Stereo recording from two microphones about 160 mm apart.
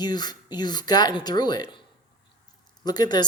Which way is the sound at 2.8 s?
25° left (ahead or behind).